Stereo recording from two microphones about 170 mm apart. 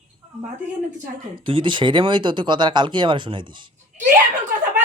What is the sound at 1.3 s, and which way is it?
Speech, 30° right (ahead or behind).